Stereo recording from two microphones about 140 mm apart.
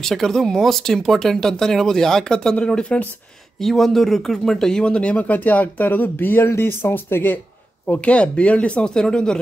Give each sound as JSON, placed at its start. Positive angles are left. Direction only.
{"t": 0.0, "sound": "speech", "side_deg": 0}